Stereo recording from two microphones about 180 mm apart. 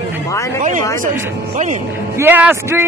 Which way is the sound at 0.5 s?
45° right (ahead or behind).